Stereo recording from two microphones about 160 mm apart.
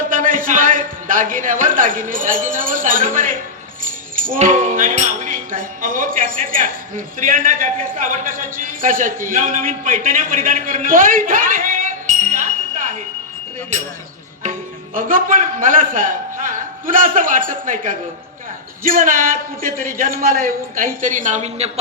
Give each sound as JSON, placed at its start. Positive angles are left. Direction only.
{"t": 0.1, "sound": "a sound", "side_deg": -55}
{"t": 4.4, "sound": "speech", "side_deg": -55}
{"t": 14.9, "sound": "speech", "side_deg": -60}